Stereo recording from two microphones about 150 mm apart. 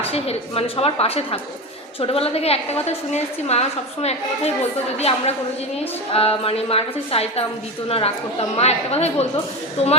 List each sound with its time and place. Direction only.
0.1 s a woman's voice: 40° left (ahead or behind)